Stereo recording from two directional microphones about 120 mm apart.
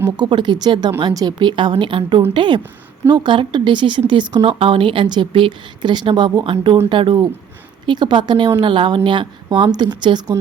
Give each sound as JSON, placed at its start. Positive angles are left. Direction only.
{"t": 0.2, "sound": "a woman's voice", "side_deg": -40}